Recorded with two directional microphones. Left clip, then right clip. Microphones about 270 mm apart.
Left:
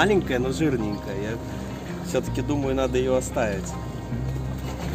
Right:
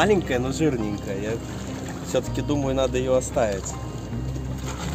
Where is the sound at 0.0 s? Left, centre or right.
Centre.